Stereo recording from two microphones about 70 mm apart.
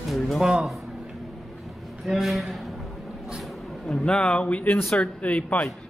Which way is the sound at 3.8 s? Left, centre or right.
Centre.